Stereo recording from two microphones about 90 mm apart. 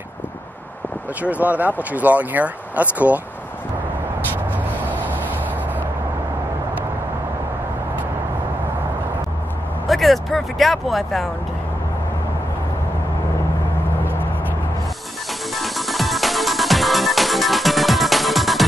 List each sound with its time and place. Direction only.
1.2 s speech: 15° right (ahead or behind)
9.8 s speech: centre (ahead or behind)
15.5 s music: centre (ahead or behind)